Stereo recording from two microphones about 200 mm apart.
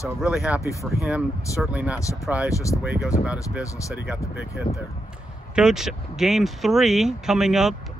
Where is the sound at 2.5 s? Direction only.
15° left (ahead or behind).